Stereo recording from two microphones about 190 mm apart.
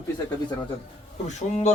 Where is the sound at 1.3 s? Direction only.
35° left (ahead or behind).